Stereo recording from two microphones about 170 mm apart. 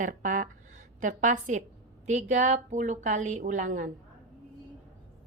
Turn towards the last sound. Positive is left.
turn(degrees=-50)  # may be behind; listen again after turning